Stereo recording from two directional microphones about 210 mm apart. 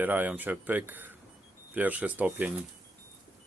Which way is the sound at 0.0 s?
10° right (ahead or behind).